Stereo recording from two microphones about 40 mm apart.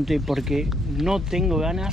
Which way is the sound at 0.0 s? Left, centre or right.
Centre.